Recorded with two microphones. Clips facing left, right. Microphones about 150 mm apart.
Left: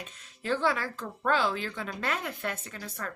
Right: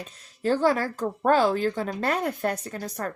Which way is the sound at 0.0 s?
40° right (ahead or behind).